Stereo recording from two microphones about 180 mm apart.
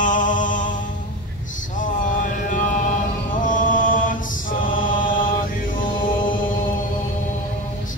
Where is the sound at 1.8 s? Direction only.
45° left (ahead or behind).